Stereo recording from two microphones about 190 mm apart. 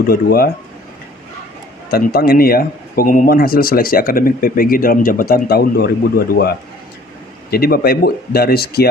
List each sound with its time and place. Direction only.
0.0 s speech: 55° left (ahead or behind)
1.9 s speech: 55° left (ahead or behind)